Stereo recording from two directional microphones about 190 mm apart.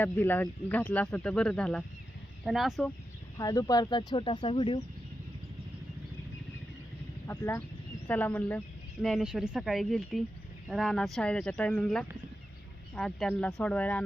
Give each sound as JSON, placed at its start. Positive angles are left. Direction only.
{"t": 0.0, "sound": "speech", "side_deg": 10}
{"t": 3.3, "sound": "speech", "side_deg": 20}
{"t": 7.3, "sound": "speech", "side_deg": 15}